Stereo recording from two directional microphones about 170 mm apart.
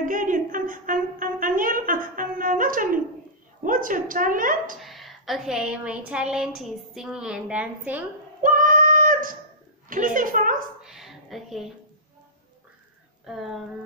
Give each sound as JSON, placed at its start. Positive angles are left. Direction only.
{"t": 0.0, "sound": "music", "side_deg": -50}
{"t": 3.6, "sound": "a woman's voice", "side_deg": -50}
{"t": 4.8, "sound": "speech", "side_deg": 0}
{"t": 8.4, "sound": "child singing", "side_deg": -55}
{"t": 9.8, "sound": "a woman's voice", "side_deg": -50}
{"t": 10.8, "sound": "a sound", "side_deg": 0}
{"t": 13.2, "sound": "a sound", "side_deg": 0}